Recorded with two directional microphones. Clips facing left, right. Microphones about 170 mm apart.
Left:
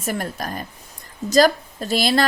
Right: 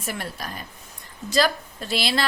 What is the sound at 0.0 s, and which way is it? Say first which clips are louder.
A woman's voice: left 6 dB; 45° left (ahead or behind).